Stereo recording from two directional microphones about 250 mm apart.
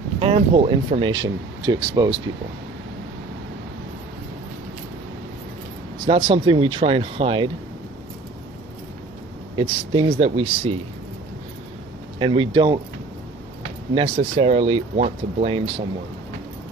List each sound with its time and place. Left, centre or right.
0.2 s speech: right
6.0 s speech: centre
9.6 s speech: right
12.2 s speech: centre
13.9 s speech: right